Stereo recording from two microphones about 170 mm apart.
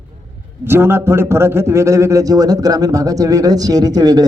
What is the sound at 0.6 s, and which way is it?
Speech, 15° right (ahead or behind).